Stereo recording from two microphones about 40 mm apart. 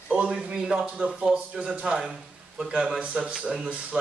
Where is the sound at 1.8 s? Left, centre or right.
Centre.